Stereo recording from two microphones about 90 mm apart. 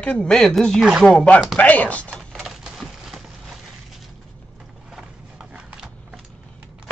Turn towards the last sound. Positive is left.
turn(degrees=-10)  # may be behind; listen again after turning